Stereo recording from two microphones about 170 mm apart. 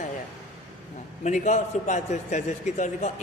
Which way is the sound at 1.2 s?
45° left (ahead or behind).